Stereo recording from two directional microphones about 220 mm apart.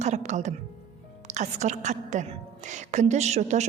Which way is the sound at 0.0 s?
30° right (ahead or behind).